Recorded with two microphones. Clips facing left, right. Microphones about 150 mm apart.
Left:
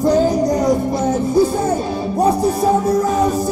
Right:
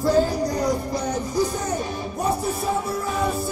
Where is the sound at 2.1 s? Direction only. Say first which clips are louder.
Left 9 dB; 40° left (ahead or behind).